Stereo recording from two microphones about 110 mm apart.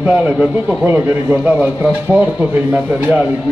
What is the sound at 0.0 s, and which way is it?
A man's voice, 10° right (ahead or behind).